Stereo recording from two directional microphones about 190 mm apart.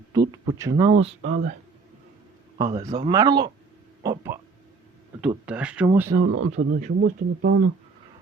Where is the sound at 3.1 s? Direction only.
20° right (ahead or behind).